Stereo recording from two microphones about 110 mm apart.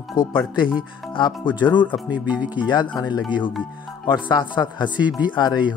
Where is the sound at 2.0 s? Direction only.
10° right (ahead or behind).